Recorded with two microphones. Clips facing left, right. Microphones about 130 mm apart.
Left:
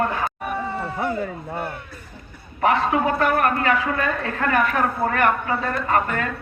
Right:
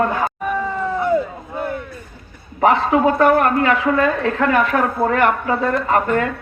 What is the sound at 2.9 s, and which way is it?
A man's voice, 60° right (ahead or behind).